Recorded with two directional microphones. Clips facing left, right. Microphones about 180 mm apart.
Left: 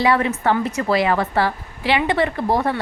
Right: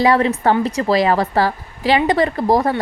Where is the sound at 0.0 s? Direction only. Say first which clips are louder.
Right 3 dB; 35° right (ahead or behind).